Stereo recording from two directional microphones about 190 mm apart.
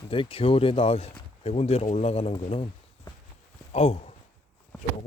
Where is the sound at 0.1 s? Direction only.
30° left (ahead or behind).